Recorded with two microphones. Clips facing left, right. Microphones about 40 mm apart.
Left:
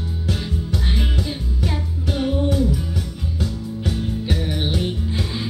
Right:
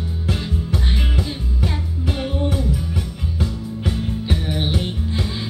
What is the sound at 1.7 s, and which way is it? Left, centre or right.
Music, centre.